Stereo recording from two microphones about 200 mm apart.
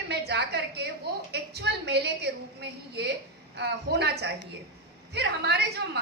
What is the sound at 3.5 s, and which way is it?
A woman's voice, 55° right (ahead or behind).